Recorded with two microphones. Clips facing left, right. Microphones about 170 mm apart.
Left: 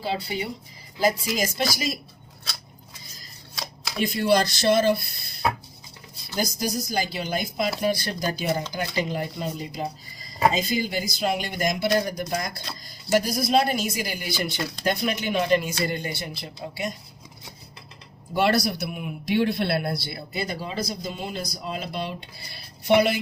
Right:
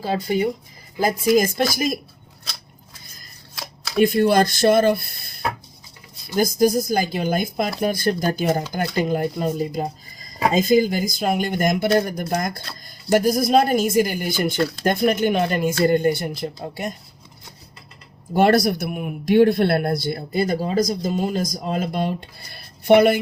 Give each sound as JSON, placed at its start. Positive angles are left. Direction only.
{"t": 0.0, "sound": "a man's voice", "side_deg": -45}
{"t": 4.0, "sound": "a man's voice", "side_deg": -50}
{"t": 18.3, "sound": "a man's voice", "side_deg": -50}